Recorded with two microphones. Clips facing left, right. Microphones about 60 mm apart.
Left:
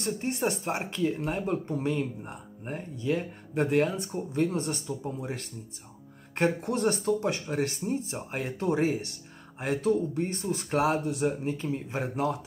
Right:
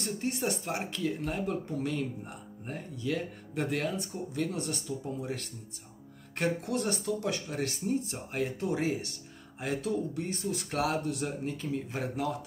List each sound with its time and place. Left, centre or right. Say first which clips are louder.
0.0 s speech: left 3 dB; left